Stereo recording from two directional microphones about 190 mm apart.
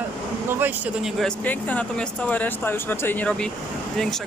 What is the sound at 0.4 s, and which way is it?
Speech, 10° right (ahead or behind).